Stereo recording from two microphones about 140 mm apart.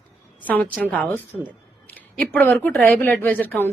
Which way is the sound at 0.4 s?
10° left (ahead or behind).